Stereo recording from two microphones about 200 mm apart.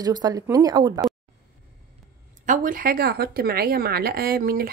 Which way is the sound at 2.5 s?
45° right (ahead or behind).